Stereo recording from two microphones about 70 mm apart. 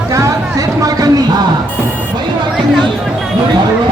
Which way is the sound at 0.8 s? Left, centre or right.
Right.